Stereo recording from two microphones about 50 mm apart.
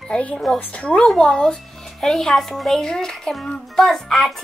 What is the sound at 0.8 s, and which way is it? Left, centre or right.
A child's voice, centre.